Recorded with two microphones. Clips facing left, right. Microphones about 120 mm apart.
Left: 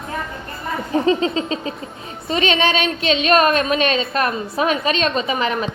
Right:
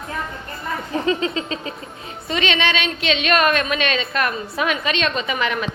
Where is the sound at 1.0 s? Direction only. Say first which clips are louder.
Left 4 dB; 30° left (ahead or behind).